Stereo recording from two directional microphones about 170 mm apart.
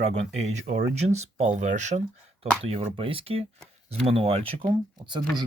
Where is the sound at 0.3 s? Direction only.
40° right (ahead or behind).